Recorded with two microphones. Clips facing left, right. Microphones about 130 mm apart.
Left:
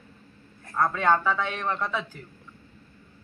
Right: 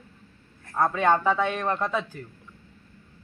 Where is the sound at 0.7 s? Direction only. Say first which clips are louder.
Right 1 dB; 20° right (ahead or behind).